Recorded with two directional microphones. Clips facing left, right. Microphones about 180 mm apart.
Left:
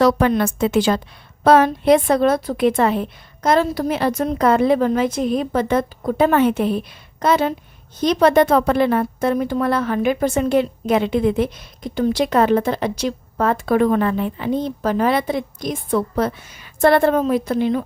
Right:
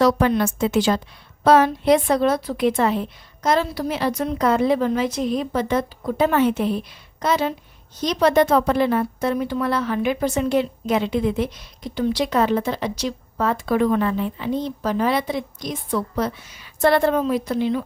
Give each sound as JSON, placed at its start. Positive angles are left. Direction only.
{"t": 0.0, "sound": "a woman's voice", "side_deg": 55}